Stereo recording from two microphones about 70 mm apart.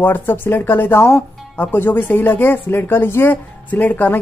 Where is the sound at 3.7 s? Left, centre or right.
Left.